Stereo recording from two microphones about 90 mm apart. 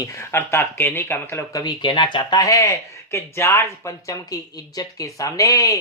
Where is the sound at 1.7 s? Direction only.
60° left (ahead or behind); by 5.7 s 40° left (ahead or behind).